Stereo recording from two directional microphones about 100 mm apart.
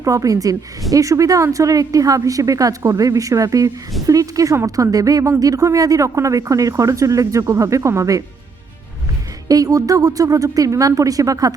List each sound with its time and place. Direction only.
0.0 s speech: 35° right (ahead or behind)
9.5 s speech: 35° right (ahead or behind)